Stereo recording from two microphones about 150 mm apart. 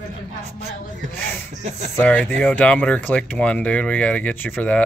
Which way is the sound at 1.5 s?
55° right (ahead or behind).